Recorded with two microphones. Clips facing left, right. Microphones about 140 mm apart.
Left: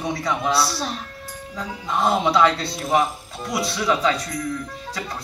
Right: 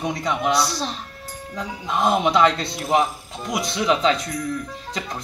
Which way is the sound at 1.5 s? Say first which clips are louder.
Even; 20° right (ahead or behind).